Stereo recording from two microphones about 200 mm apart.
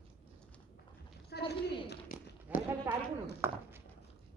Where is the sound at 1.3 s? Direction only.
55° left (ahead or behind).